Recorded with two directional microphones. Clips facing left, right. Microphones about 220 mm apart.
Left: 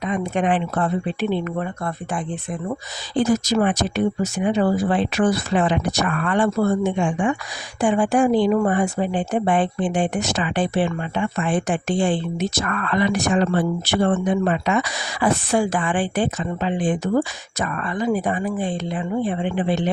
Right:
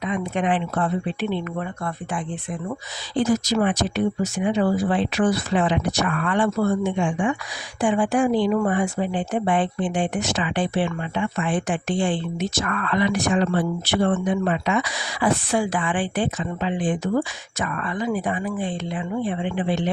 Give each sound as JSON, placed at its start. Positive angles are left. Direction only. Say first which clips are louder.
{"t": 0.0, "sound": "speech", "louder": "left 2 dB", "side_deg": 45}